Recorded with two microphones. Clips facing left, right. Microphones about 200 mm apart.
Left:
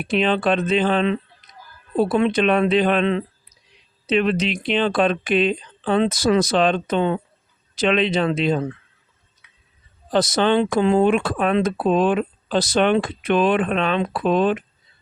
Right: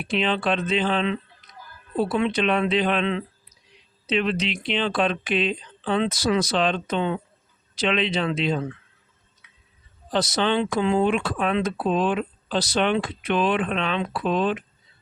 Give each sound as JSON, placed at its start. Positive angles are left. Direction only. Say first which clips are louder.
{"t": 0.0, "sound": "speech", "louder": "left 4 dB", "side_deg": 50}
{"t": 10.1, "sound": "speech", "louder": "left 5 dB", "side_deg": 50}